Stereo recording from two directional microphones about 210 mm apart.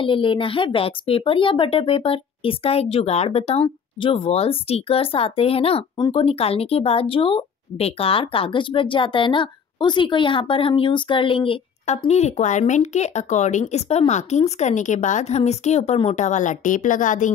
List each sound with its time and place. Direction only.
0.0 s speech: 25° left (ahead or behind)